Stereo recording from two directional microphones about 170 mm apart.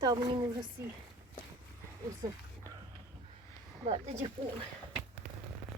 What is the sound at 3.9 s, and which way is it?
Speech, 35° right (ahead or behind).